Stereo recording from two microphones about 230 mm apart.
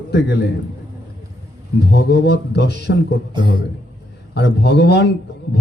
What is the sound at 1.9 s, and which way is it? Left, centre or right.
Speech, left.